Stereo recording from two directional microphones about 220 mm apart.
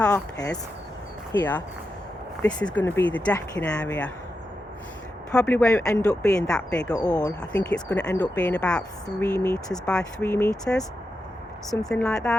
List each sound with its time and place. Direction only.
1.3 s speech: 10° left (ahead or behind)
5.3 s speech: 5° left (ahead or behind)
6.9 s speech: 15° left (ahead or behind)